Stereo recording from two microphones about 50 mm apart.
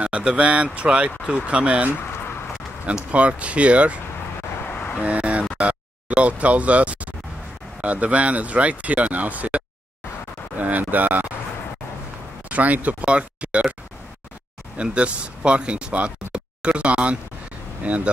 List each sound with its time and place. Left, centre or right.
0.0 s speech: right
3.1 s speech: right
4.6 s vehicle: left
5.0 s vehicle: right
5.6 s speech: right
10.6 s a sound: right
12.4 s speech: right
14.8 s speech: right